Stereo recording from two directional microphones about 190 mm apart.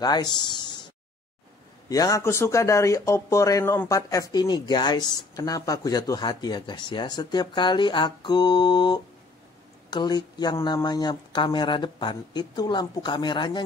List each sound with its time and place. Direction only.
0.0 s speech: 20° left (ahead or behind)
1.9 s speech: 20° left (ahead or behind)